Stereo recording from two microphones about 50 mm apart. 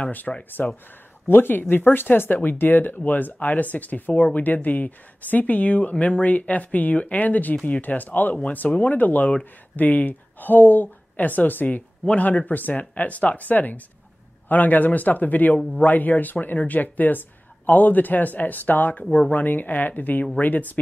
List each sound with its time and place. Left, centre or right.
0.0 s speech: left
1.2 s speech: left